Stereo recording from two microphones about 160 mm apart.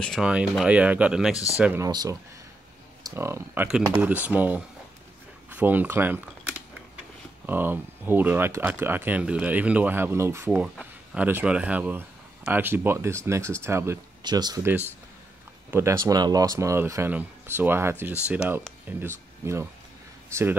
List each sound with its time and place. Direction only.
0.0 s speech: centre (ahead or behind)
1.3 s speech: 20° left (ahead or behind)
1.6 s speech: 10° right (ahead or behind)
1.9 s speech: 25° right (ahead or behind)
7.4 s speech: 10° right (ahead or behind)
15.7 s speech: 15° right (ahead or behind)